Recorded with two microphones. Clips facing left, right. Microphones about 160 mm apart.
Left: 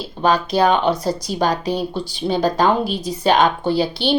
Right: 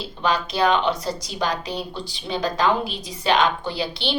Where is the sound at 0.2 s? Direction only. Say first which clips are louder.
Left 5 dB; 45° left (ahead or behind).